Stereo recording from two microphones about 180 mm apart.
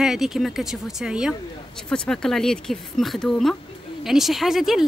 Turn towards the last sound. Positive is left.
turn(degrees=0)  # may be behind; listen again after turning